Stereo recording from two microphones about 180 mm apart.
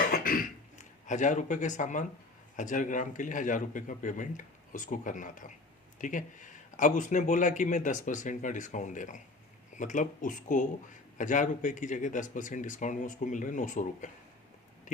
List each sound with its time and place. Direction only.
0.1 s cough: 50° left (ahead or behind)
1.0 s a man's voice: 45° left (ahead or behind)